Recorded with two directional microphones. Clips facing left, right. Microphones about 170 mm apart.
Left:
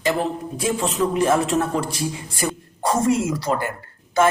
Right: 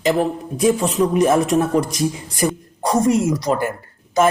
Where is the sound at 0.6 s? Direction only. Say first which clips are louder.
Right 7 dB; 35° right (ahead or behind).